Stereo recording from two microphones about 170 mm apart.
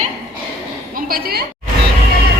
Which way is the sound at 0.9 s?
60° right (ahead or behind).